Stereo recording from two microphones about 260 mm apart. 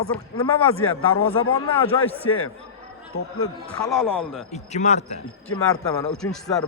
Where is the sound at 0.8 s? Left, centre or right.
Left.